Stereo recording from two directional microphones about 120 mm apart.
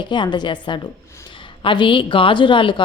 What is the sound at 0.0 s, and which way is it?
A woman's voice, 40° left (ahead or behind).